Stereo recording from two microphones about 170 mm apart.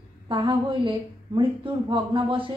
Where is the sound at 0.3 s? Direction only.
30° right (ahead or behind).